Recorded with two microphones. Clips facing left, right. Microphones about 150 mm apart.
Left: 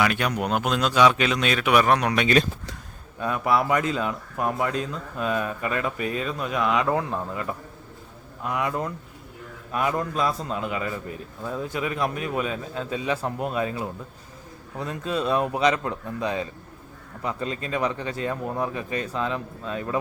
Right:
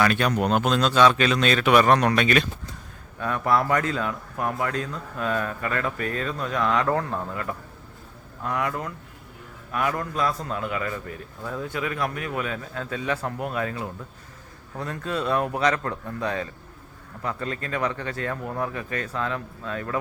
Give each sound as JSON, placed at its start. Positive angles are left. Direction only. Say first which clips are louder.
{"t": 0.0, "sound": "speech", "louder": "right 2 dB", "side_deg": 10}